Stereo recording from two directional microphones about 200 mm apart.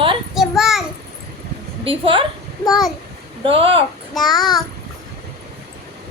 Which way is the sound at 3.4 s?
25° right (ahead or behind).